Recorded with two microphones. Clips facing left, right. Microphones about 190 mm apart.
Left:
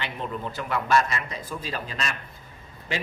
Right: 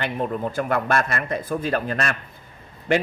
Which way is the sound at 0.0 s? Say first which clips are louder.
Right 7 dB; 50° right (ahead or behind).